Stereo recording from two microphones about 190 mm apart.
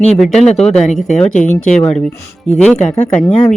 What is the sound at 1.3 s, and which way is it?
Speech, 40° left (ahead or behind).